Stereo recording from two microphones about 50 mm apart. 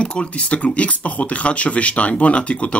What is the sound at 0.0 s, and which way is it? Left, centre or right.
Speech, left.